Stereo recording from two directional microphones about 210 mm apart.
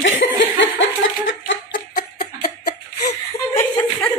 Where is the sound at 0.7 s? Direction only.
60° left (ahead or behind).